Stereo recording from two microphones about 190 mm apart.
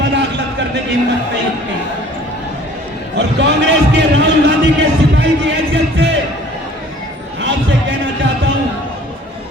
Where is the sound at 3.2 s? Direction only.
65° right (ahead or behind).